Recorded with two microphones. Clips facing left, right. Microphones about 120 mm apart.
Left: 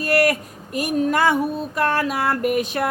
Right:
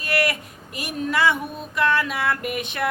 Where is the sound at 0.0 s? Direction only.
40° left (ahead or behind).